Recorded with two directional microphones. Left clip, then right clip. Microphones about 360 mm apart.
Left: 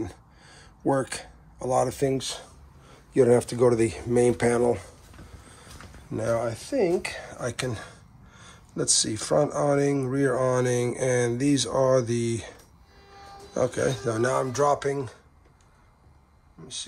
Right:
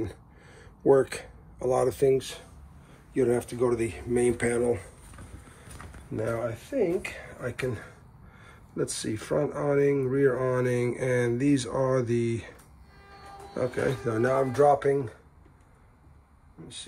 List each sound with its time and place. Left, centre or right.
0.1 s a sound: centre
3.1 s speech: centre
6.1 s speech: centre
13.6 s speech: centre